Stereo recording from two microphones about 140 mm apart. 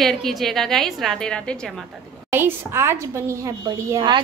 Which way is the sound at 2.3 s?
15° right (ahead or behind).